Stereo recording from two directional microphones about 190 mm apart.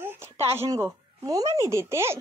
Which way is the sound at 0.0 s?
10° right (ahead or behind).